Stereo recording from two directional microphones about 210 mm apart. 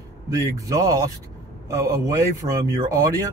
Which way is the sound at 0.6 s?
15° right (ahead or behind).